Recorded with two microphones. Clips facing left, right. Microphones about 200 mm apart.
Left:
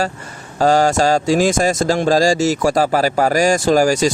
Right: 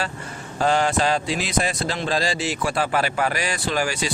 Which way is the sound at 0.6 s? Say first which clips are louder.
Left 6 dB; 40° left (ahead or behind).